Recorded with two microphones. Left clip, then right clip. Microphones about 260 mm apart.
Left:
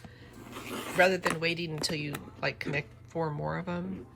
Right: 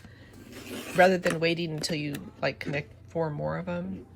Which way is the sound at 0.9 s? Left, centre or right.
Centre.